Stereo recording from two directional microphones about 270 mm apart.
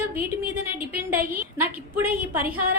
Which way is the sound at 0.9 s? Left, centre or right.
Right.